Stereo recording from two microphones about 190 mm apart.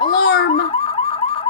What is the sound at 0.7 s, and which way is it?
Car alarm, 30° left (ahead or behind).